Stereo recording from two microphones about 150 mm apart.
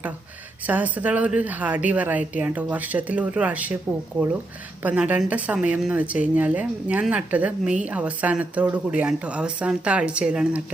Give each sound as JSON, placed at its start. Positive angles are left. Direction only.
{"t": 0.7, "sound": "a woman's voice", "side_deg": -10}
{"t": 4.8, "sound": "a woman's voice", "side_deg": -10}